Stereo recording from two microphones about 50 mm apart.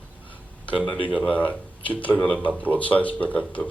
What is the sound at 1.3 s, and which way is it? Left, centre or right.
Speech, left.